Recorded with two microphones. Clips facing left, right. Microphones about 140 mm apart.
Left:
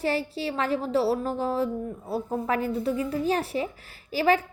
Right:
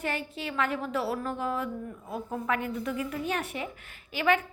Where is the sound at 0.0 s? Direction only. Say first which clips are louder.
Left 6 dB; 35° left (ahead or behind).